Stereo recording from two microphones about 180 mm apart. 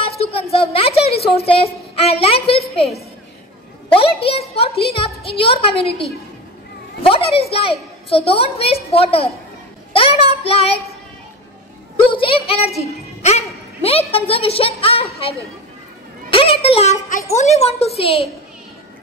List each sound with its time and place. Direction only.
0.0 s a sound: 30° left (ahead or behind)
1.2 s speech: 35° left (ahead or behind)
4.0 s speech: 30° left (ahead or behind)
12.0 s speech: 30° left (ahead or behind)
16.3 s speech: 30° left (ahead or behind)